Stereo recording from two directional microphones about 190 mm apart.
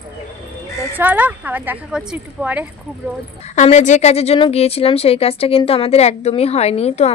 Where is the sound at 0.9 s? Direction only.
10° right (ahead or behind).